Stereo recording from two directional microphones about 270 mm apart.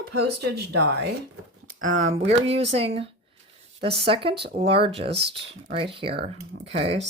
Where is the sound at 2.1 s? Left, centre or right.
Right.